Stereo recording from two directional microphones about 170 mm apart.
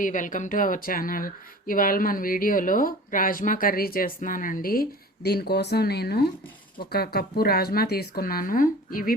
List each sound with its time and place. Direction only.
0.0 s speech: 50° left (ahead or behind)